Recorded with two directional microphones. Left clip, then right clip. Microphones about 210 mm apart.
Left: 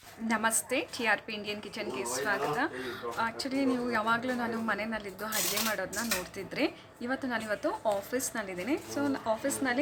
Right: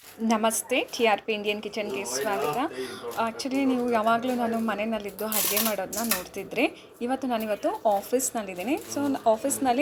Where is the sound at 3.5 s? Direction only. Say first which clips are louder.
Right 5 dB; 20° left (ahead or behind).